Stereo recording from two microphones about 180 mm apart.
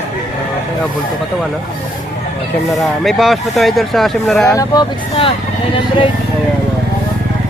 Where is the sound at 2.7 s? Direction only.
Centre (ahead or behind).